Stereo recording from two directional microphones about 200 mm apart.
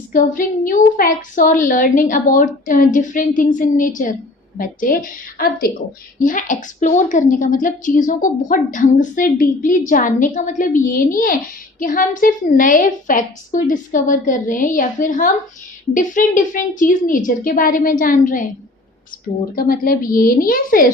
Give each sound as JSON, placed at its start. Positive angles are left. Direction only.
{"t": 0.1, "sound": "a woman's voice", "side_deg": 45}
{"t": 19.5, "sound": "a woman's voice", "side_deg": 45}